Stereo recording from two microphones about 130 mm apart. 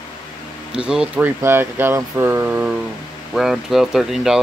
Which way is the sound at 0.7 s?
5° right (ahead or behind).